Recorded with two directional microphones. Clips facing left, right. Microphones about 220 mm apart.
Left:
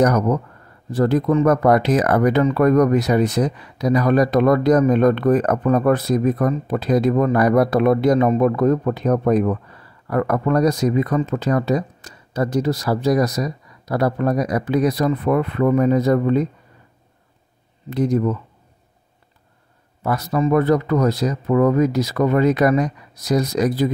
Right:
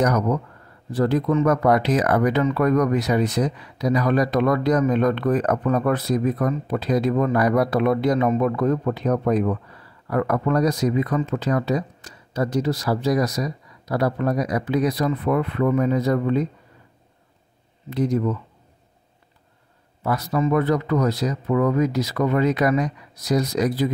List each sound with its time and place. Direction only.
0.0 s speech: 45° left (ahead or behind)
17.8 s speech: 45° left (ahead or behind)
20.0 s speech: 45° left (ahead or behind)